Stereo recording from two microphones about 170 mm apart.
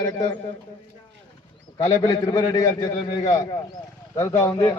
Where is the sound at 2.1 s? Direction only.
20° left (ahead or behind).